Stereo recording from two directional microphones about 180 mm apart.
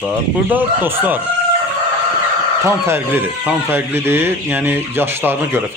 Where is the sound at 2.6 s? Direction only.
15° right (ahead or behind).